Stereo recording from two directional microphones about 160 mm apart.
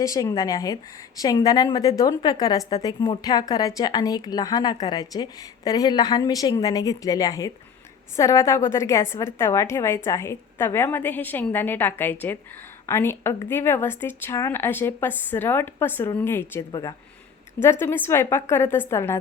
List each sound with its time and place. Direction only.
0.0 s a woman's voice: 20° left (ahead or behind)